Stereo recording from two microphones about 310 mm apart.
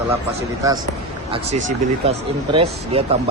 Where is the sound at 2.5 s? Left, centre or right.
Centre.